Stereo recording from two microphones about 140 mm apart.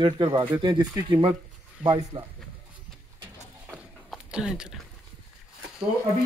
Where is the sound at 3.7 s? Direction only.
5° right (ahead or behind).